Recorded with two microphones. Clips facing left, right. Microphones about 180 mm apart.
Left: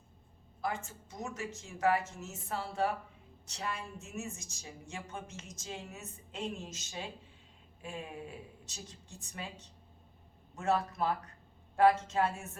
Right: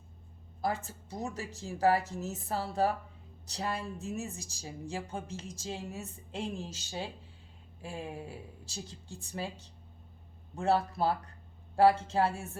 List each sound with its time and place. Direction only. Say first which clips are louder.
0.6 s speech: right 4 dB; 35° right (ahead or behind)